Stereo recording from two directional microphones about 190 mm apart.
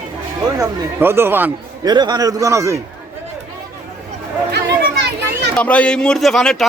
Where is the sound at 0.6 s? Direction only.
15° right (ahead or behind).